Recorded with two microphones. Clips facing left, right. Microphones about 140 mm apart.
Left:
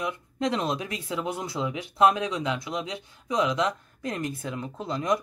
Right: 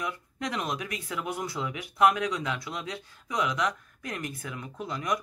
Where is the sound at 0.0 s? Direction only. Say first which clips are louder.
Left 5 dB; 25° left (ahead or behind).